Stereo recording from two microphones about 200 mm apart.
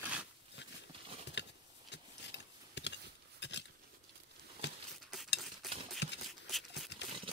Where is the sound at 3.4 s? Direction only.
60° left (ahead or behind).